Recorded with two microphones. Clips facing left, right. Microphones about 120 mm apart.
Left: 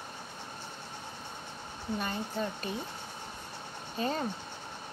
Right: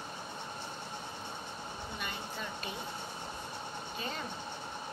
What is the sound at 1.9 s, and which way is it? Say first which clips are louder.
Speech: left 9 dB; 40° left (ahead or behind).